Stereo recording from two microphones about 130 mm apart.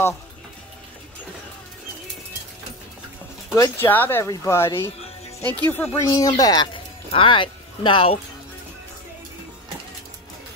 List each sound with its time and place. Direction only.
3.5 s speech: 20° left (ahead or behind)
6.0 s speech: 30° left (ahead or behind)
7.1 s speech: 40° left (ahead or behind)